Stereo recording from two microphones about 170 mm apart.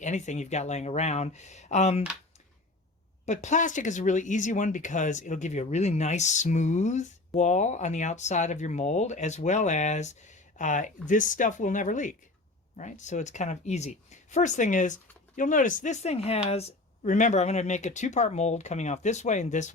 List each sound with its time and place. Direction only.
0.0 s speech: 45° left (ahead or behind)
3.2 s speech: 45° left (ahead or behind)